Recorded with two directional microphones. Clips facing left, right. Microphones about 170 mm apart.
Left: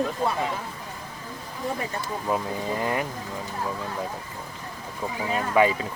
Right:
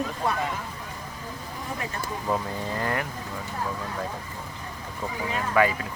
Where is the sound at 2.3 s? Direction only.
15° left (ahead or behind).